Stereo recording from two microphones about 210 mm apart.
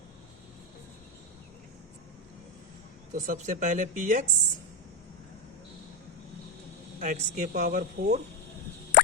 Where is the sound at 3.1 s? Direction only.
35° right (ahead or behind).